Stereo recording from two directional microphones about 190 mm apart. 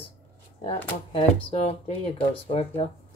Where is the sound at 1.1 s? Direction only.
35° left (ahead or behind).